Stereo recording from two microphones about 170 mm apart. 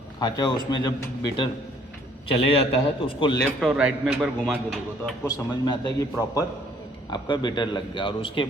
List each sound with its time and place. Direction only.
0.2 s a man's voice: 25° left (ahead or behind)
3.6 s a man's voice: centre (ahead or behind)
5.2 s a man's voice: 25° left (ahead or behind)